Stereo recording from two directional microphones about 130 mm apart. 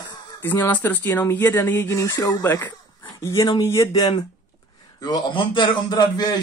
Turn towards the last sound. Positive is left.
turn(degrees=30)  # may be behind; listen again after turning